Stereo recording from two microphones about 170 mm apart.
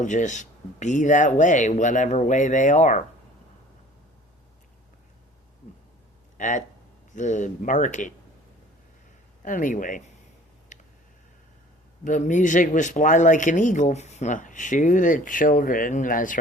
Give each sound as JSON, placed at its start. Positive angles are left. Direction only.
{"t": 0.0, "sound": "speech", "side_deg": 45}
{"t": 6.3, "sound": "speech", "side_deg": 50}
{"t": 9.4, "sound": "speech", "side_deg": 50}
{"t": 10.7, "sound": "a sound", "side_deg": 45}
{"t": 12.0, "sound": "speech", "side_deg": 45}